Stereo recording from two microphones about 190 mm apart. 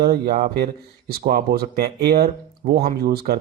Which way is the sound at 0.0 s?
55° right (ahead or behind).